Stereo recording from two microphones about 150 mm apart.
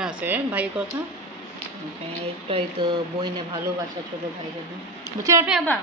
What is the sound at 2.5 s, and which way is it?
Speech, 40° right (ahead or behind).